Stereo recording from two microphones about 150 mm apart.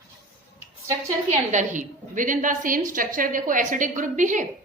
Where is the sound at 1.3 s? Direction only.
55° right (ahead or behind).